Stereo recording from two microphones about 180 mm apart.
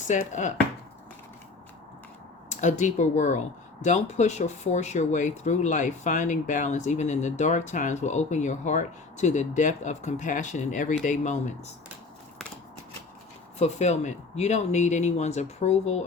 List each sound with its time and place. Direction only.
0.1 s speech: 45° left (ahead or behind)
2.5 s speech: 40° left (ahead or behind)
13.6 s speech: 40° left (ahead or behind)